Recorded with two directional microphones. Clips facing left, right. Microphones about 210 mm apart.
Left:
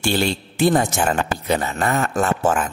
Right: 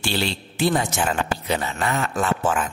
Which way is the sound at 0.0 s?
50° left (ahead or behind).